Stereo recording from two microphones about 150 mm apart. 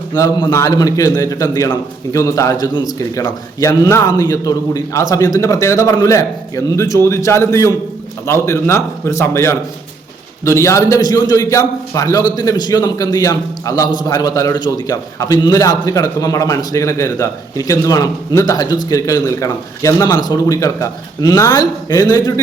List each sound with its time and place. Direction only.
0.1 s a man's voice: 25° left (ahead or behind)